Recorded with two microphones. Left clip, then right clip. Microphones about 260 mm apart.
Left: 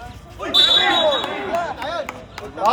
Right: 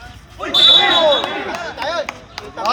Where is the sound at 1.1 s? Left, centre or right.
Right.